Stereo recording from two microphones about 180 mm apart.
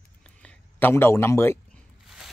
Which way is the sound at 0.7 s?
10° left (ahead or behind).